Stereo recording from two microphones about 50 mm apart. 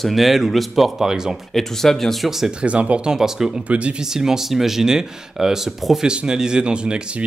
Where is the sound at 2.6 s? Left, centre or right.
Right.